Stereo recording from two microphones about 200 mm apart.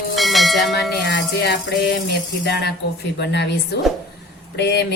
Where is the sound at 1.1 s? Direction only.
55° left (ahead or behind).